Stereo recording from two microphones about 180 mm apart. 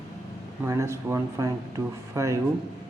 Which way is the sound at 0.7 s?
15° right (ahead or behind).